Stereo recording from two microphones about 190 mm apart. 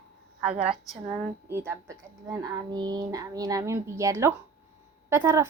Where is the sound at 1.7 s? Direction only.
15° right (ahead or behind).